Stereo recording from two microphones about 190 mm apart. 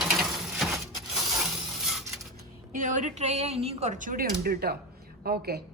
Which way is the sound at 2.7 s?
45° right (ahead or behind).